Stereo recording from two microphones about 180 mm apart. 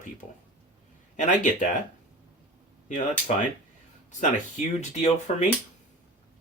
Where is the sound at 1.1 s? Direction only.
45° left (ahead or behind).